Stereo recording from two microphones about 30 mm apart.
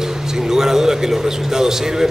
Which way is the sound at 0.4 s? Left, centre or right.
Centre.